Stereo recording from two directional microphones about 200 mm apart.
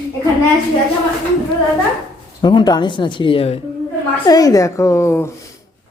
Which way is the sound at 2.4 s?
20° left (ahead or behind).